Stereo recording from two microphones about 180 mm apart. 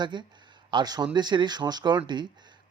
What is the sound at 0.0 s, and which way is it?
A man's voice, 25° right (ahead or behind).